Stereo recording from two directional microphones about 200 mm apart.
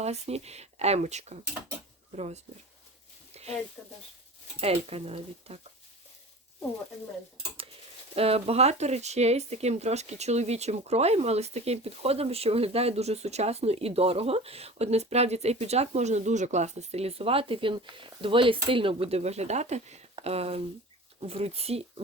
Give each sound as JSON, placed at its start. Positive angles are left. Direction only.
{"t": 0.0, "sound": "speech", "side_deg": -30}
{"t": 3.3, "sound": "a sound", "side_deg": -30}
{"t": 3.8, "sound": "speech", "side_deg": 5}
{"t": 4.6, "sound": "speech", "side_deg": -30}
{"t": 8.1, "sound": "speech", "side_deg": -30}